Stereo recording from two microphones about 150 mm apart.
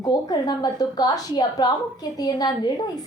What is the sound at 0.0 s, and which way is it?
A woman's voice, 25° left (ahead or behind).